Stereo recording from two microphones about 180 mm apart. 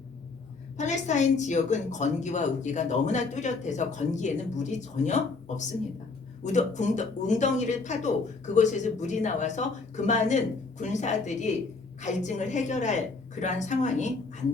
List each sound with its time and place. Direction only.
0.8 s a woman's voice: 40° left (ahead or behind)